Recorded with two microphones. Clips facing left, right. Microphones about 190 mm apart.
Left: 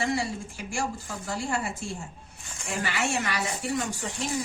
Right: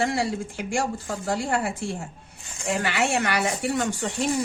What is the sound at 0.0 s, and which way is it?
Speech, 65° right (ahead or behind).